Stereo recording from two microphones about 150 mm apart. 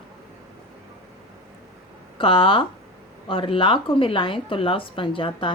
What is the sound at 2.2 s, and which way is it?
Speech, 35° left (ahead or behind).